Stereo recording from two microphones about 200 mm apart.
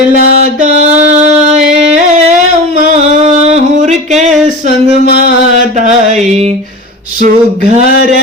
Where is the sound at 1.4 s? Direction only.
35° right (ahead or behind).